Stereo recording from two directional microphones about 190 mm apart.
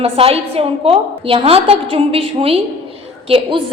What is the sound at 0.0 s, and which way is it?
A woman's voice, 30° right (ahead or behind).